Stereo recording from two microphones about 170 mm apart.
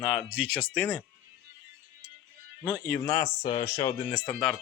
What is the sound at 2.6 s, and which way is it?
Speech, 5° left (ahead or behind).